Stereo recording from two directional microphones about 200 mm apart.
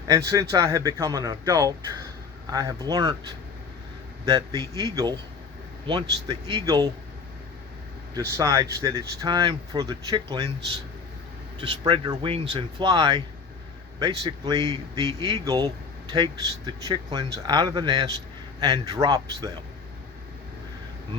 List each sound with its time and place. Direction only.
0.1 s speech: 15° right (ahead or behind)
4.3 s speech: 20° right (ahead or behind)
8.1 s speech: 15° right (ahead or behind)
11.6 s speech: 25° right (ahead or behind)